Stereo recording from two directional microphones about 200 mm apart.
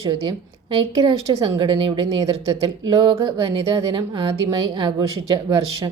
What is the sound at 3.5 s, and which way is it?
A woman's voice, 25° right (ahead or behind).